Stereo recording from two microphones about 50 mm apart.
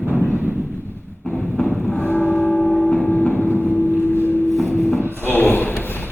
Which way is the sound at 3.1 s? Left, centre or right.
Left.